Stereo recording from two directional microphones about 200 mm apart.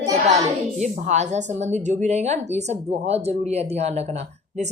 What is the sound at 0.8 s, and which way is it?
A woman's voice, 35° right (ahead or behind).